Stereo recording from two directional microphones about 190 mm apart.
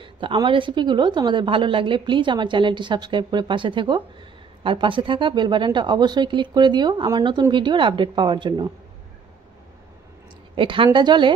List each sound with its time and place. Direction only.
0.0 s a woman's voice: 25° right (ahead or behind)
10.5 s a woman's voice: 25° right (ahead or behind)